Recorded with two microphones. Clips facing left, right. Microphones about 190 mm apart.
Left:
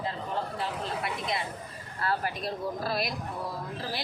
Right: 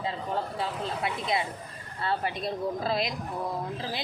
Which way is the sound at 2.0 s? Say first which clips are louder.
Right 1 dB; 25° right (ahead or behind).